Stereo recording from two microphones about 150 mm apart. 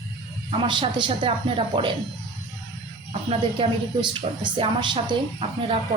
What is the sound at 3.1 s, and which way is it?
Speech, 40° right (ahead or behind).